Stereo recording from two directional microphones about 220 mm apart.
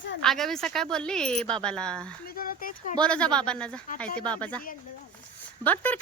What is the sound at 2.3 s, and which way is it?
Speech, 40° left (ahead or behind).